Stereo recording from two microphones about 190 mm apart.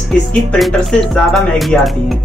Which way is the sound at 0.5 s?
Centre (ahead or behind).